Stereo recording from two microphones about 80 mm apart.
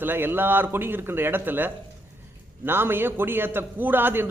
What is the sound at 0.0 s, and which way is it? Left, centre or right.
A man's voice, right.